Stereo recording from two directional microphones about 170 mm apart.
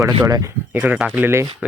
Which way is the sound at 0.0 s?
20° right (ahead or behind).